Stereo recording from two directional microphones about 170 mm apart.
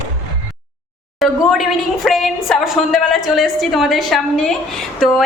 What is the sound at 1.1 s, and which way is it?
A woman's voice, centre (ahead or behind).